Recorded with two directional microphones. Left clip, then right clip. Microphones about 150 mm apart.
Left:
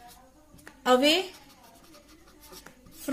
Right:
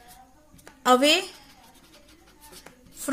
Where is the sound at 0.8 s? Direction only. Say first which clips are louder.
Right 3 dB; 50° right (ahead or behind).